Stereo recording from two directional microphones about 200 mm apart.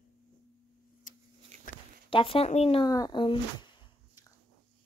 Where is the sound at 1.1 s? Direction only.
40° left (ahead or behind).